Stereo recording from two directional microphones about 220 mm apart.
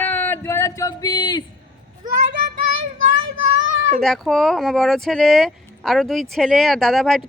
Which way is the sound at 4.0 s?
Centre (ahead or behind).